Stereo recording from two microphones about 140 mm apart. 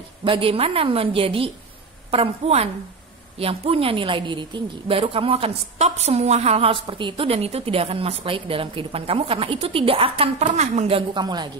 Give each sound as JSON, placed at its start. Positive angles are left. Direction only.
{"t": 0.2, "sound": "a woman's voice", "side_deg": -40}